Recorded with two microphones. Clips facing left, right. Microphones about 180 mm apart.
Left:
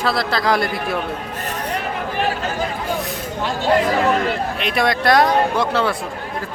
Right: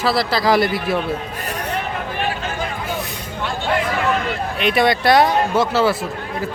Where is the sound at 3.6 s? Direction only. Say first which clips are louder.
Left 4 dB; 40° left (ahead or behind).